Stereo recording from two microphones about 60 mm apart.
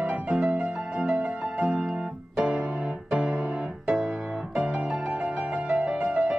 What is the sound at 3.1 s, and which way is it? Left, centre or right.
Music, centre.